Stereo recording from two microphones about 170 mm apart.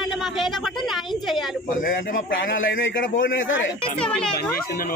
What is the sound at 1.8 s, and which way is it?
A man's voice, 55° left (ahead or behind).